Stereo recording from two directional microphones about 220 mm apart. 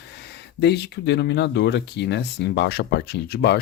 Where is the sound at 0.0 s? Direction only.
50° left (ahead or behind).